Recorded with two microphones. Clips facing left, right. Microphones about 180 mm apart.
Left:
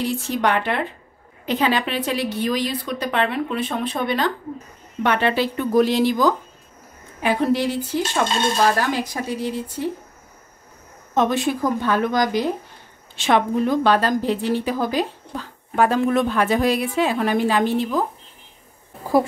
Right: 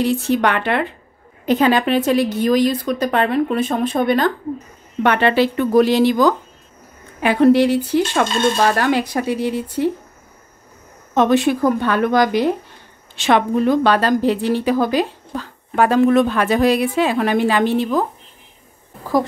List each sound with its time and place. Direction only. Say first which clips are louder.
0.3 s a woman's voice: right 4 dB; 65° right (ahead or behind)
1.4 s a woman's voice: right 6 dB; 45° right (ahead or behind)
5.0 s a woman's voice: right 5 dB; 75° right (ahead or behind)
11.1 s a woman's voice: right 5 dB; 70° right (ahead or behind)
13.1 s a woman's voice: right 3 dB; 75° right (ahead or behind)